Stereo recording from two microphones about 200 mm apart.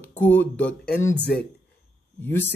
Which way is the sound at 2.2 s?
10° left (ahead or behind).